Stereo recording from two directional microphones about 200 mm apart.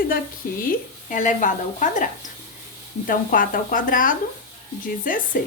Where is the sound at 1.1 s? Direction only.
40° left (ahead or behind).